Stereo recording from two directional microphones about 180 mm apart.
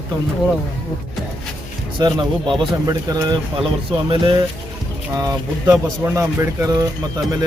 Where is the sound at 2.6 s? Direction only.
20° right (ahead or behind).